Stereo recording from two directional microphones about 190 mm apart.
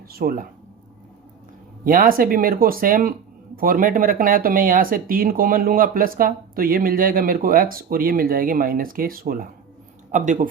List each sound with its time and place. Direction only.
0.1 s speech: 50° right (ahead or behind)
1.8 s speech: 45° right (ahead or behind)